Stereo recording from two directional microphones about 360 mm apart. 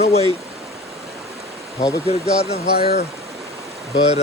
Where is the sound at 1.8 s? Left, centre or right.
Centre.